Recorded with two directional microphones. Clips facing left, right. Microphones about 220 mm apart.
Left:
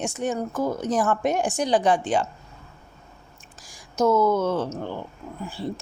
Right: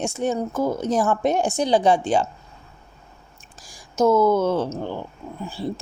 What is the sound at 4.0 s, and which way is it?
Speech, 30° right (ahead or behind).